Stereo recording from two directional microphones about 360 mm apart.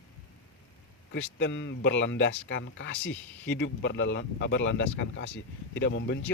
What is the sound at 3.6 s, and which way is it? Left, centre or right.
Speech, left.